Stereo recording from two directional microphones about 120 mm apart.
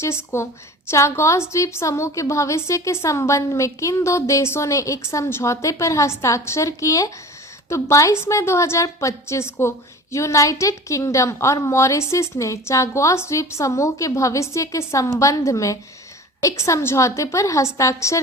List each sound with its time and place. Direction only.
0.0 s a woman's voice: 20° left (ahead or behind)